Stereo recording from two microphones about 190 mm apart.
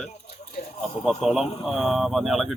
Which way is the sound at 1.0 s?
Centre (ahead or behind).